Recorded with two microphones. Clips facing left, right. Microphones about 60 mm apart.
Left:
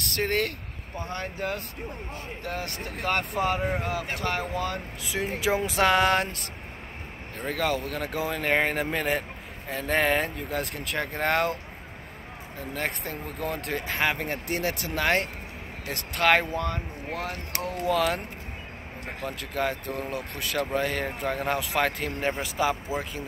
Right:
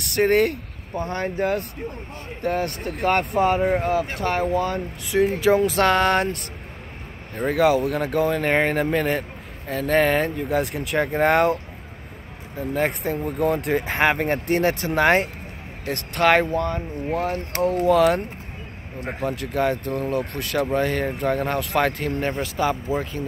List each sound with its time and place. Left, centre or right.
0.1 s speech: centre
0.9 s speech: right
1.2 s speech: right
5.0 s speech: centre
7.3 s speech: centre
12.7 s speech: centre
13.8 s speech: right
14.1 s speech: right
15.9 s speech: centre
17.3 s speech: right
17.8 s speech: centre
19.4 s speech: centre